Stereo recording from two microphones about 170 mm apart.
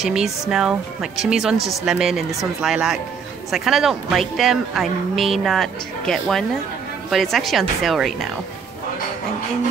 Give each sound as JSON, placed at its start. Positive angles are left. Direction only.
{"t": 0.0, "sound": "speech", "side_deg": -5}